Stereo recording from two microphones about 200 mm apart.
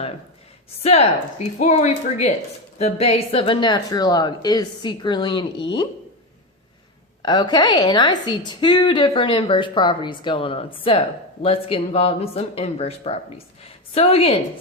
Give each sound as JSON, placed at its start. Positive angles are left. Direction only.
{"t": 0.8, "sound": "a woman's voice", "side_deg": 30}
{"t": 7.2, "sound": "a woman's voice", "side_deg": 20}